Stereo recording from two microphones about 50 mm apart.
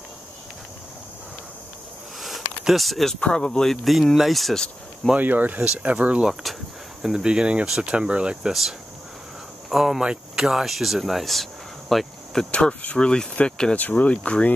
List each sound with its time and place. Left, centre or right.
2.1 s a sound: centre
3.2 s speech: centre
5.1 s speech: right
6.4 s speech: centre
7.2 s speech: centre
9.7 s speech: centre
11.9 s cricket: centre
12.4 s speech: left
13.7 s speech: left